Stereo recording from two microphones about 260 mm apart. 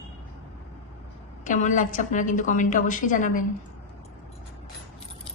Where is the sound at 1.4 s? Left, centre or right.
Left.